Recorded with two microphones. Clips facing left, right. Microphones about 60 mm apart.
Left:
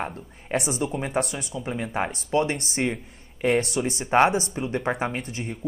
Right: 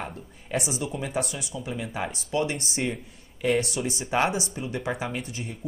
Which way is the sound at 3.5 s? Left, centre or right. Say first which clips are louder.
Left 2 dB; left.